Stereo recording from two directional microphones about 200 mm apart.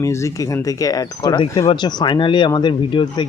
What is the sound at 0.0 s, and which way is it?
Speech, 15° left (ahead or behind).